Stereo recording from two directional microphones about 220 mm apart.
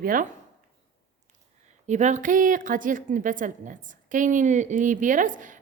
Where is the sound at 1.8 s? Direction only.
35° right (ahead or behind).